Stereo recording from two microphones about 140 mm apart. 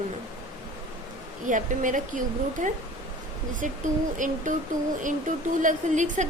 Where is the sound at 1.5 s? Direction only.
65° right (ahead or behind).